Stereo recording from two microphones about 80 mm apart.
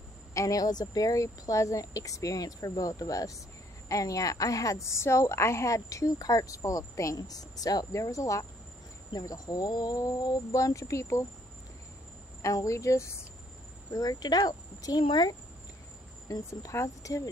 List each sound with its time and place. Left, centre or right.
0.3 s a woman's voice: left
10.5 s speech: left
12.4 s speech: left
13.9 s speech: left
16.3 s a woman's voice: left